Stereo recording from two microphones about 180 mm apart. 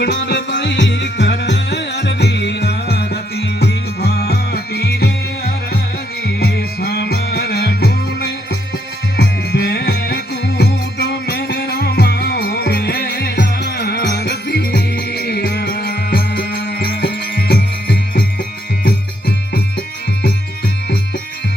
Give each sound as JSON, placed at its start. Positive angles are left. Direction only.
{"t": 0.0, "sound": "music", "side_deg": 75}
{"t": 6.2, "sound": "music", "side_deg": 65}